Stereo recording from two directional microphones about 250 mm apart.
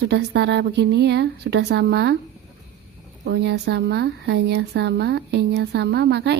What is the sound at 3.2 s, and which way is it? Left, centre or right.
A woman's voice, right.